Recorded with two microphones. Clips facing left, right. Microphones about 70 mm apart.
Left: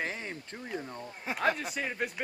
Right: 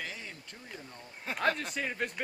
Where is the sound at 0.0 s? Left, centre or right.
Left.